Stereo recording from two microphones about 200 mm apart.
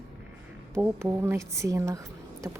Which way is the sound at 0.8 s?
10° right (ahead or behind).